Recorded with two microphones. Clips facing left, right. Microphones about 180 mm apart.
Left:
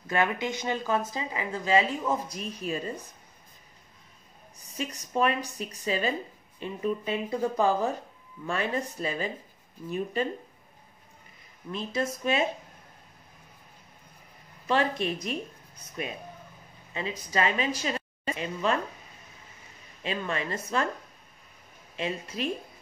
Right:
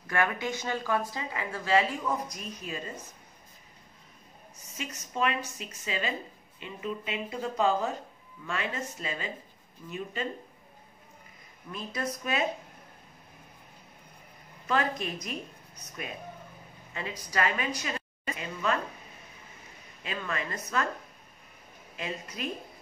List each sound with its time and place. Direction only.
0.0 s speech: 20° left (ahead or behind)
4.6 s speech: 35° left (ahead or behind)
8.5 s speech: 35° left (ahead or behind)
11.7 s speech: 25° left (ahead or behind)
14.7 s speech: 30° left (ahead or behind)
16.9 s a woman's voice: 20° left (ahead or behind)
20.0 s speech: 25° left (ahead or behind)
21.9 s speech: 25° left (ahead or behind)